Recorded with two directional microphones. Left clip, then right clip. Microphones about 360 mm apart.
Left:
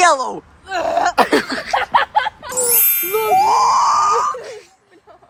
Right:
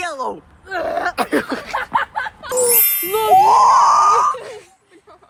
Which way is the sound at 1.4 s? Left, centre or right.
Centre.